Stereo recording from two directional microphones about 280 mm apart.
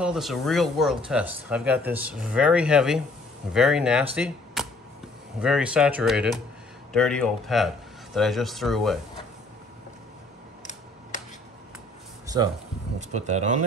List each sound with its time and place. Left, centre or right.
0.0 s speech: centre
12.3 s a sound: centre
13.1 s speech: right